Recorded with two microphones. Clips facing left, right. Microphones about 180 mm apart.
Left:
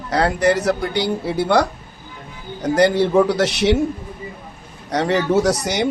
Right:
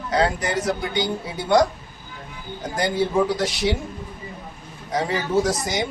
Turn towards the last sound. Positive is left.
turn(degrees=70)  # may be behind; listen again after turning